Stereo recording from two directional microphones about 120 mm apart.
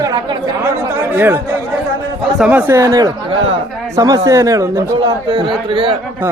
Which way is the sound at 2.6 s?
20° right (ahead or behind).